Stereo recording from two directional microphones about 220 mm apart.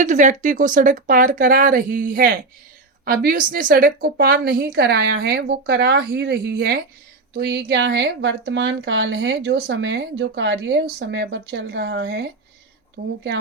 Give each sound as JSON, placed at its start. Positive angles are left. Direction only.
{"t": 0.0, "sound": "a woman's voice", "side_deg": -35}